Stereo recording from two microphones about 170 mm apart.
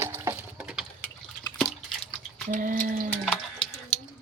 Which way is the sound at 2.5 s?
55° right (ahead or behind).